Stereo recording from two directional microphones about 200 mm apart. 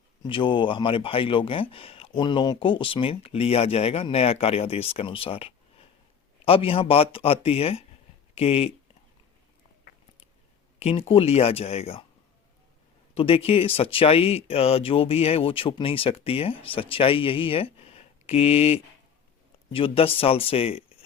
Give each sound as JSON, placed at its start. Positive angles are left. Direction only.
{"t": 0.2, "sound": "speech", "side_deg": 25}
{"t": 10.8, "sound": "speech", "side_deg": 30}
{"t": 13.1, "sound": "speech", "side_deg": 30}